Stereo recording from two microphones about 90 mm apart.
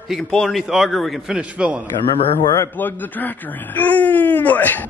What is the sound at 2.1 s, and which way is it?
Speech, 90° left.